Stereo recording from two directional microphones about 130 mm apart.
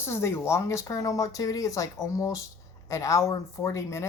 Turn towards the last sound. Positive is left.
turn(degrees=20)  # may be behind; listen again after turning